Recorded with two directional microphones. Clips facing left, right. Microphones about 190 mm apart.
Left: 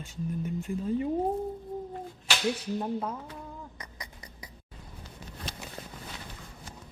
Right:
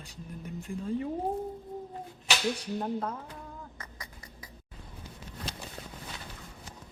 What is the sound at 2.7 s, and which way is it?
Speech, 5° left (ahead or behind).